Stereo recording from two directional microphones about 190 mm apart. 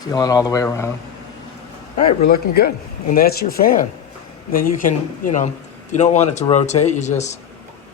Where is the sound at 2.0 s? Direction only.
50° left (ahead or behind).